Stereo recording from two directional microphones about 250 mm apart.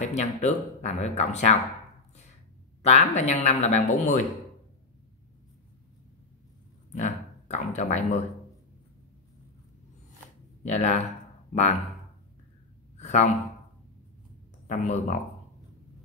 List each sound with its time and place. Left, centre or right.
0.0 s speech: left
2.8 s speech: left
7.0 s speech: left
10.6 s speech: left
13.0 s a sound: left
14.7 s speech: left